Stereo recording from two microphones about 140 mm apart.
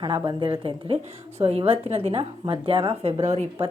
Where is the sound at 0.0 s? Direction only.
35° right (ahead or behind); by 3.7 s 50° right (ahead or behind).